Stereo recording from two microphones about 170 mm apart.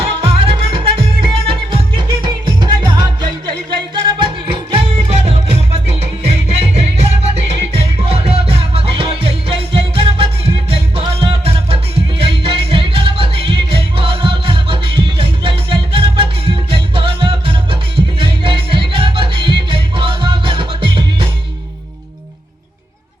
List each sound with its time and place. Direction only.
0.0 s music: 35° right (ahead or behind)